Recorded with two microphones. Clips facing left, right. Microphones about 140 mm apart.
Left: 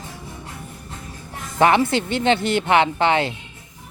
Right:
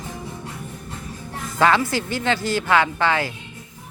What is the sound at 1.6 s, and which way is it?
Speech, 20° left (ahead or behind).